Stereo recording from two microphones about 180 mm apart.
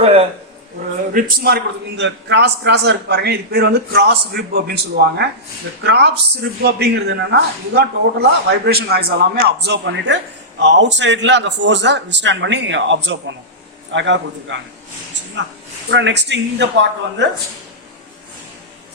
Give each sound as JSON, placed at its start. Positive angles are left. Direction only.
{"t": 0.0, "sound": "a sound", "side_deg": -35}
{"t": 1.1, "sound": "a man's voice", "side_deg": -55}
{"t": 15.9, "sound": "speech", "side_deg": -80}